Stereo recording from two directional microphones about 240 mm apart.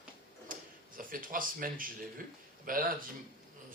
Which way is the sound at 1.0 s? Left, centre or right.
Right.